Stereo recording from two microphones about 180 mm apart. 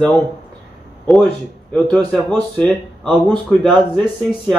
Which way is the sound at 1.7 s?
Centre (ahead or behind).